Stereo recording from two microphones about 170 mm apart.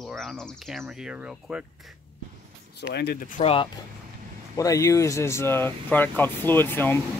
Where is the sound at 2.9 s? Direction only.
70° left (ahead or behind).